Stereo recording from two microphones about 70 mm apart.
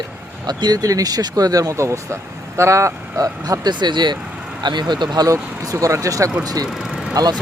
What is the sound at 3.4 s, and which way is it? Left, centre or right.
Speech, right.